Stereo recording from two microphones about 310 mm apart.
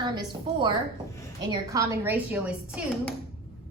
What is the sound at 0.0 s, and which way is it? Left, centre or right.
A woman's voice, centre.